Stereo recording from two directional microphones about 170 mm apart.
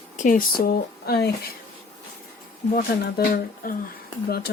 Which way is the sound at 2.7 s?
60° left (ahead or behind).